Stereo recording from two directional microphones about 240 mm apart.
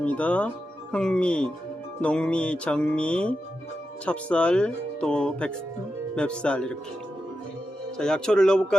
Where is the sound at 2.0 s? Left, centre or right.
Centre.